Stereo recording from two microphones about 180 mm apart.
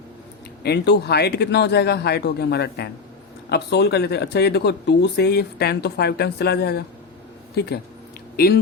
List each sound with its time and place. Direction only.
0.6 s speech: 65° left (ahead or behind)